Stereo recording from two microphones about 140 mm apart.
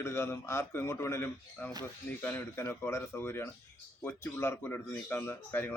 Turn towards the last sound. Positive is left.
turn(degrees=15)  # may be behind; listen again after turning